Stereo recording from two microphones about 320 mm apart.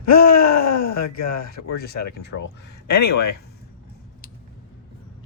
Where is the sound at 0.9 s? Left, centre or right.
Left.